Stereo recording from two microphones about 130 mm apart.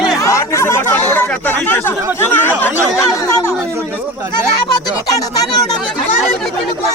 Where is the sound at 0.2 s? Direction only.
25° left (ahead or behind).